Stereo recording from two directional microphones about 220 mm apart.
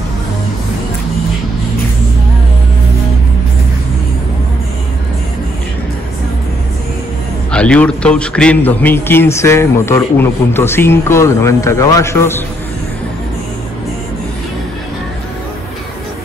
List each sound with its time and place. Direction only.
7.5 s a man's voice: 5° left (ahead or behind)